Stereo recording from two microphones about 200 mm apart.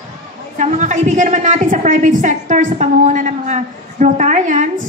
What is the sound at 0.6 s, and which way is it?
A woman's voice, 35° right (ahead or behind).